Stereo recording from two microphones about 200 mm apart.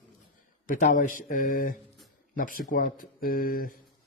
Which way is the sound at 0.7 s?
40° left (ahead or behind).